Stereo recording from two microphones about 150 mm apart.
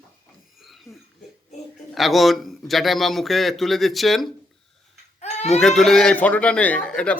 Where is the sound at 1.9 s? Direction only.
Centre (ahead or behind).